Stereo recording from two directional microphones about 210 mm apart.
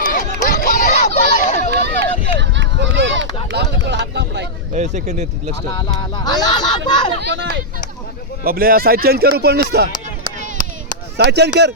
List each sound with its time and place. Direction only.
0.0 s chatter: 40° left (ahead or behind)
2.0 s run: 60° right (ahead or behind)
3.5 s vehicle: 55° right (ahead or behind)
4.7 s speech: 35° right (ahead or behind)
5.7 s speech: 20° left (ahead or behind)
7.2 s speech: 55° right (ahead or behind)
8.4 s speech: 45° right (ahead or behind)
11.3 s speech: 55° right (ahead or behind)